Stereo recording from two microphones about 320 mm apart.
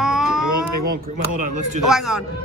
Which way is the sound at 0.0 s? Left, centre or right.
Centre.